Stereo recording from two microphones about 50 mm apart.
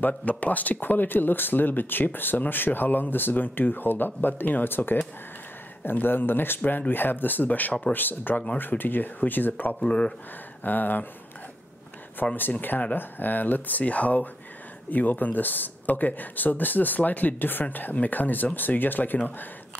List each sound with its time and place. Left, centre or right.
0.0 s speech: left
9.8 s speech: left
10.6 s speech: left
12.4 s speech: left